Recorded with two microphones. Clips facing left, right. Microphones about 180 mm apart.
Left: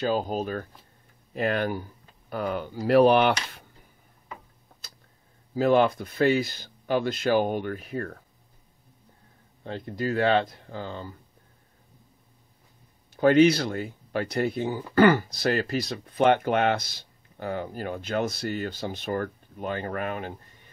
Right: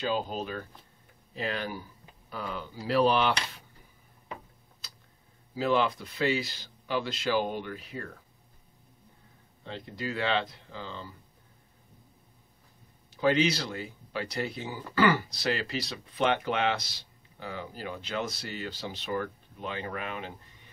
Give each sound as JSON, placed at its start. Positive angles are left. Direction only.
{"t": 0.0, "sound": "speech", "side_deg": 45}
{"t": 1.3, "sound": "speech", "side_deg": 55}
{"t": 5.5, "sound": "speech", "side_deg": 50}
{"t": 9.7, "sound": "speech", "side_deg": 50}
{"t": 13.1, "sound": "speech", "side_deg": 50}